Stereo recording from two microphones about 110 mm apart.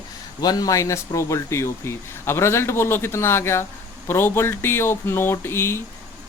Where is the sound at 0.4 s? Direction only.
35° left (ahead or behind).